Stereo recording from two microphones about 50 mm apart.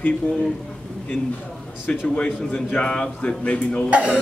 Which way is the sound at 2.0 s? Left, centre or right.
Left.